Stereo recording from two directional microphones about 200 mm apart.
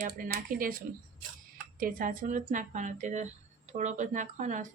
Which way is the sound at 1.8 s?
40° right (ahead or behind).